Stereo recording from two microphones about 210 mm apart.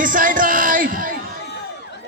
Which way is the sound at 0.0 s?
40° right (ahead or behind).